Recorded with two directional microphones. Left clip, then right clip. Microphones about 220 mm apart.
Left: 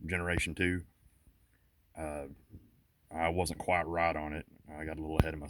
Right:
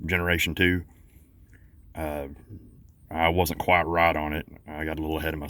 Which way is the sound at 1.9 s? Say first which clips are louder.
Right 8 dB; centre (ahead or behind).